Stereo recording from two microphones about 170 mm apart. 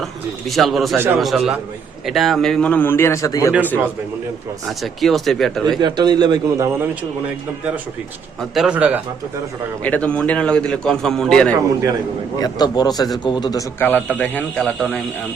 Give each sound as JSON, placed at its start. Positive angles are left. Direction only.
{"t": 0.0, "sound": "a man's voice", "side_deg": 0}
{"t": 4.6, "sound": "a man's voice", "side_deg": 0}
{"t": 5.8, "sound": "a man's voice", "side_deg": -25}
{"t": 8.4, "sound": "a man's voice", "side_deg": 0}
{"t": 9.8, "sound": "a man's voice", "side_deg": 10}
{"t": 12.4, "sound": "a man's voice", "side_deg": 25}